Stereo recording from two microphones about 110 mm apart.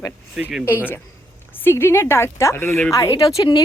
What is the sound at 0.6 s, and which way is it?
Speech, 20° left (ahead or behind).